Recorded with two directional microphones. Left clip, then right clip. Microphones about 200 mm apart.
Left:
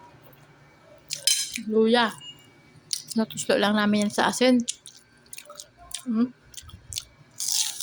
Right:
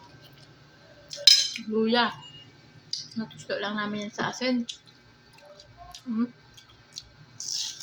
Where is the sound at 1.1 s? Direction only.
30° left (ahead or behind).